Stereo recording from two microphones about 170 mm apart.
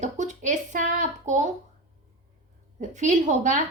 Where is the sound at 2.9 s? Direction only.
45° right (ahead or behind).